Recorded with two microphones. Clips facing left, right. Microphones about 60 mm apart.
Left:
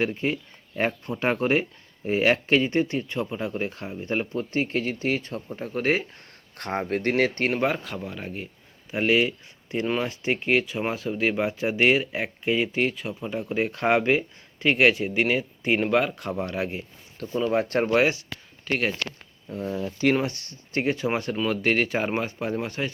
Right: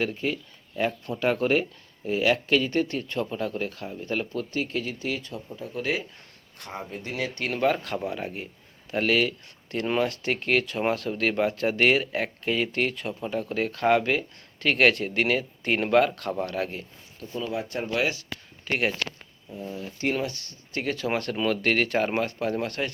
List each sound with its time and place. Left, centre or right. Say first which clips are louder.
0.0 s speech: left 2 dB; left
0.8 s speech: left 1 dB; left
2.0 s speech: left 2 dB; left
6.6 s speech: left 9 dB; left
7.5 s speech: right 1 dB; centre
7.9 s speech: right 3 dB; centre
8.9 s speech: left 2 dB; centre
16.1 s speech: even; centre
17.5 s speech: left 8 dB; left
18.0 s speech: left 4 dB; left
18.6 s speech: left 1 dB; centre
19.5 s speech: left 6 dB; left
20.1 s speech: left 3 dB; left; by 22.9 s centre